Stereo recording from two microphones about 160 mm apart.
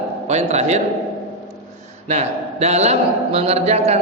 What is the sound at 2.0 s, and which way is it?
A man's voice, 45° right (ahead or behind).